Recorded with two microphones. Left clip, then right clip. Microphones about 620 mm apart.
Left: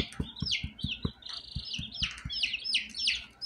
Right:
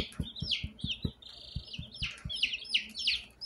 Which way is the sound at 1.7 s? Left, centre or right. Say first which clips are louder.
Left 7 dB; right.